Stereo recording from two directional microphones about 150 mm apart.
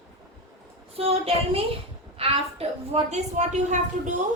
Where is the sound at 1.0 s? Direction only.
40° right (ahead or behind).